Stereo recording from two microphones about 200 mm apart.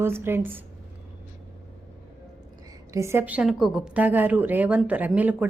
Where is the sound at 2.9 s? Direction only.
15° right (ahead or behind).